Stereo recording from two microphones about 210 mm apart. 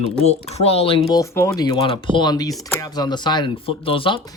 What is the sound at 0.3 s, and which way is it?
Speech, 30° left (ahead or behind).